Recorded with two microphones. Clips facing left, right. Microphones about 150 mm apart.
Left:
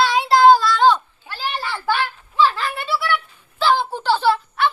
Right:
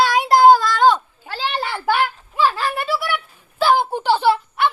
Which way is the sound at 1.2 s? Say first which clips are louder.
Right 3 dB; 90° right.